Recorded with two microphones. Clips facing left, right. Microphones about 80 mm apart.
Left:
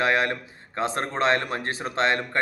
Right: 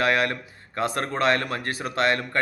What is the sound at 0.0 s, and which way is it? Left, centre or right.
Speech, left.